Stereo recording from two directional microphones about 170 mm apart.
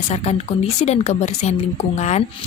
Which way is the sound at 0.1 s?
40° left (ahead or behind).